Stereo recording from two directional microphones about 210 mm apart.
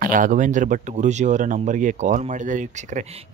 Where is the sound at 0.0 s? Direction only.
40° right (ahead or behind).